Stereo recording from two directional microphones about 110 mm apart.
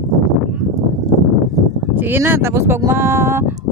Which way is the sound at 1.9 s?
20° right (ahead or behind).